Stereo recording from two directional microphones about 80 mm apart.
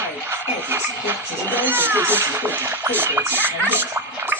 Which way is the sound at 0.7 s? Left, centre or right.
Right.